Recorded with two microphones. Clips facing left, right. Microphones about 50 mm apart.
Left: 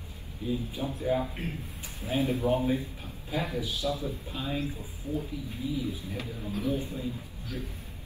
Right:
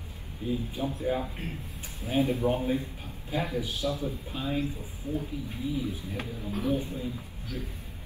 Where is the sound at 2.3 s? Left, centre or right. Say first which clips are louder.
Even; right.